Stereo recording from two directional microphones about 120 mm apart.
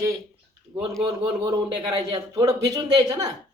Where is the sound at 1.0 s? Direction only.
40° right (ahead or behind).